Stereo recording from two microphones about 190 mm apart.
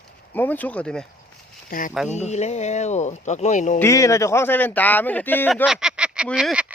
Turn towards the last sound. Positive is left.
turn(degrees=-5)  # may be behind; listen again after turning